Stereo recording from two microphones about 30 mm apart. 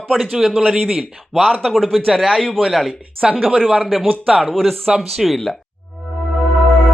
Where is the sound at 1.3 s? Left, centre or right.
Centre.